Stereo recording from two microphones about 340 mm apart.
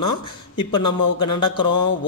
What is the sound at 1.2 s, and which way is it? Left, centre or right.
Speech, centre.